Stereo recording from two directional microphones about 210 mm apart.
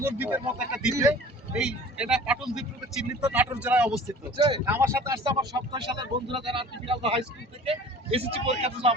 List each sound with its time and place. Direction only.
0.0 s speech: 10° right (ahead or behind); by 9.0 s 30° right (ahead or behind)